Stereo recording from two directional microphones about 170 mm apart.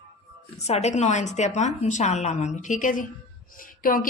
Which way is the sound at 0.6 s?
40° left (ahead or behind).